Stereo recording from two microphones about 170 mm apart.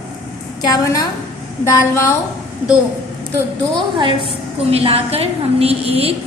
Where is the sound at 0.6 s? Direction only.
20° left (ahead or behind).